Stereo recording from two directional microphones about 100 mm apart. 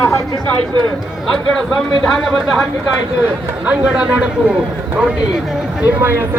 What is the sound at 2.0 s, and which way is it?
Speech, 5° left (ahead or behind).